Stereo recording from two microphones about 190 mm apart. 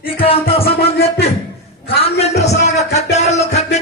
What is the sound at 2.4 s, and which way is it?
Music, 35° left (ahead or behind).